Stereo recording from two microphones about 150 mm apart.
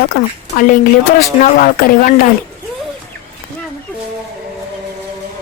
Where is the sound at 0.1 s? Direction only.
65° left (ahead or behind).